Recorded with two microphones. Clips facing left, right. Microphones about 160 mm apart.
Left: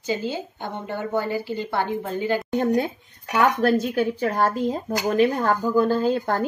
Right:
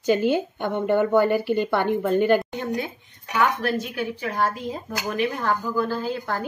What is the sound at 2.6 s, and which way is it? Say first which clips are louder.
Speech: left 6 dB; 50° left (ahead or behind).